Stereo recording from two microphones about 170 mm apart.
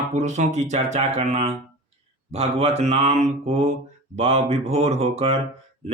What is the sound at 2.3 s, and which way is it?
Mantra, 35° right (ahead or behind).